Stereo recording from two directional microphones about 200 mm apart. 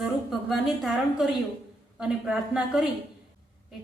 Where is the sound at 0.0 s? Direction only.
Centre (ahead or behind).